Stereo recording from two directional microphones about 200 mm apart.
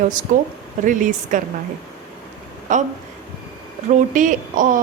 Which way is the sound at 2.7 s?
40° right (ahead or behind).